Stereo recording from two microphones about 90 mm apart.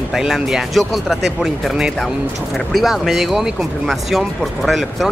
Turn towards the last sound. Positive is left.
turn(degrees=5)  # may be behind; listen again after turning